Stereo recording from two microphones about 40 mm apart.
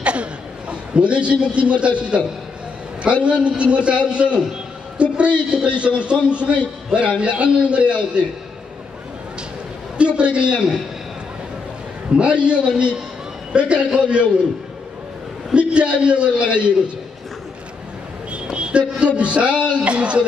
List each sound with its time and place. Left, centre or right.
0.0 s a sound: right
3.3 s a man's voice: right
9.9 s a man's voice: right
12.2 s a man's voice: right
15.5 s a man's voice: right
18.3 s a sound: right
19.1 s a man's voice: right